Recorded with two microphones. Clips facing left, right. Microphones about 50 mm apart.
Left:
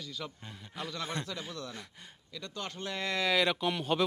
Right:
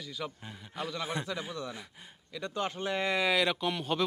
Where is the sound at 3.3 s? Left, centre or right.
Centre.